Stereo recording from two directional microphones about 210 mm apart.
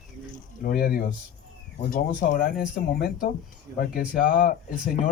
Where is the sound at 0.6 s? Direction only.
45° left (ahead or behind).